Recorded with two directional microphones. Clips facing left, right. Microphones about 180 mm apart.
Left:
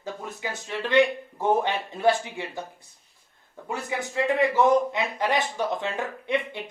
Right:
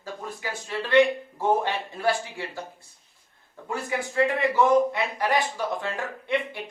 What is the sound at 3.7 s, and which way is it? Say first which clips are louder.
Speech: right 1 dB; 20° left (ahead or behind).